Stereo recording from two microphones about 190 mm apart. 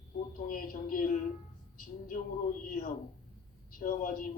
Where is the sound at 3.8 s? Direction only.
45° left (ahead or behind).